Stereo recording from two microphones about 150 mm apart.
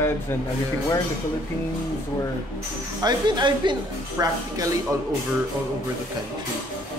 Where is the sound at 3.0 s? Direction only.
25° right (ahead or behind).